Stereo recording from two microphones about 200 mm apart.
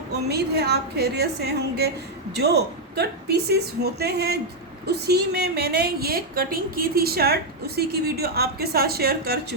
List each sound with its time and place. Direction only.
0.3 s a woman's voice: 55° right (ahead or behind)